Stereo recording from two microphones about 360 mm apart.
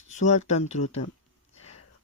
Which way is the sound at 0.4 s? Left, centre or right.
Centre.